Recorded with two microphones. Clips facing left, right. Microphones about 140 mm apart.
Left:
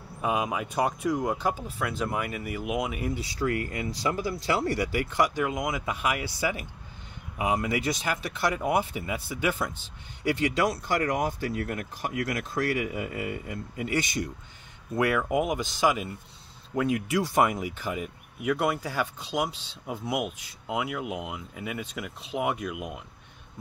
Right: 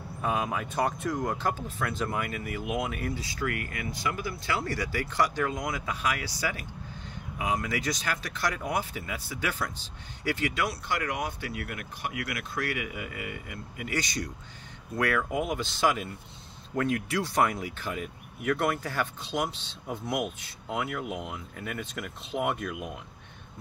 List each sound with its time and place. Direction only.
0.2 s speech: 10° left (ahead or behind)
3.2 s speech: 30° left (ahead or behind)
7.3 s speech: 25° left (ahead or behind)
10.6 s speech: 40° left (ahead or behind); by 22.9 s 5° left (ahead or behind)